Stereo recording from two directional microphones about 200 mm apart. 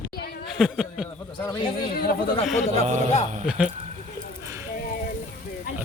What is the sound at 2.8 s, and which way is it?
Speech, 40° right (ahead or behind).